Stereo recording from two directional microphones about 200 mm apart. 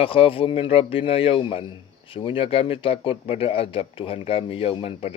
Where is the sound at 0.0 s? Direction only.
30° left (ahead or behind).